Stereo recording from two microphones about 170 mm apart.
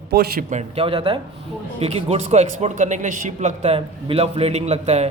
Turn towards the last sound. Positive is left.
turn(degrees=-40)  # may be behind; listen again after turning